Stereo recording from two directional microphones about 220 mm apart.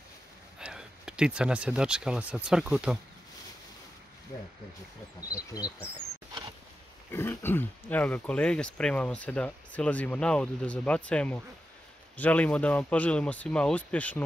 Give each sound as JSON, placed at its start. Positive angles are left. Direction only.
{"t": 0.6, "sound": "speech", "side_deg": -5}
{"t": 5.5, "sound": "speech", "side_deg": 15}
{"t": 7.1, "sound": "speech", "side_deg": 10}